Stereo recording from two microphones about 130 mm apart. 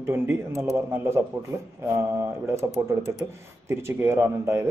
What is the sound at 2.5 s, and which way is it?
Speech, 25° right (ahead or behind).